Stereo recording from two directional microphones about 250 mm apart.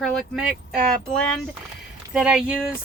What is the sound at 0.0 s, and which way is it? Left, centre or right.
Speech, centre.